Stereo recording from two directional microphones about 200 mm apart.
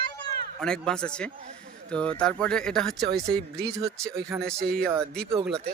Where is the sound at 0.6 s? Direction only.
5° left (ahead or behind).